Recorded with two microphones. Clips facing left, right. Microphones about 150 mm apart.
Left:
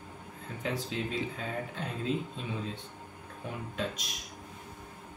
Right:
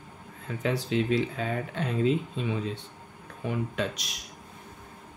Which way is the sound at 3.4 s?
80° right.